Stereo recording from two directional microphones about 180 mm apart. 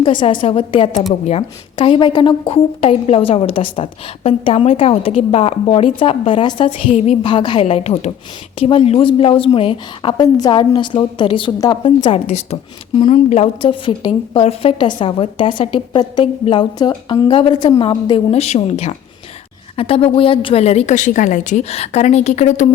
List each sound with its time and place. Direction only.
0.0 s a woman's voice: 25° left (ahead or behind)
12.0 s a woman's voice: 35° left (ahead or behind)